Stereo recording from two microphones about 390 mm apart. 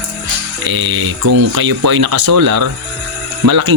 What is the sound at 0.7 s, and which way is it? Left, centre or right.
Speech, right.